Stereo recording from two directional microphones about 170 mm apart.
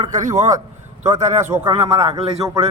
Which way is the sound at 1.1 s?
40° right (ahead or behind).